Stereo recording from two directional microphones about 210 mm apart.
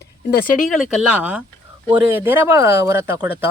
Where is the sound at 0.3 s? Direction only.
40° left (ahead or behind).